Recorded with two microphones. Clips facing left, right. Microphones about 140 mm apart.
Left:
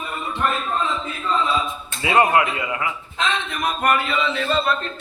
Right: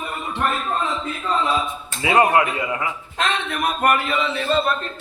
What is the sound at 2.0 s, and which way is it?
Speech, 25° right (ahead or behind).